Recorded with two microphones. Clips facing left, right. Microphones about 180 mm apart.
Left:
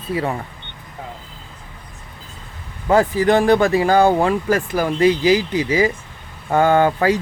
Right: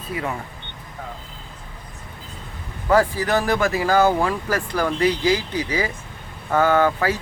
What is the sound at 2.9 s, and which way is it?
Speech, 25° left (ahead or behind).